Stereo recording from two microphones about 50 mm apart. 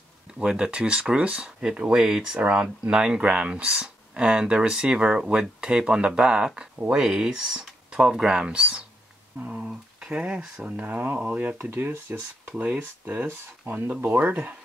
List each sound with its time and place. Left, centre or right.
0.3 s speech: centre
9.7 s speech: centre
11.6 s speech: right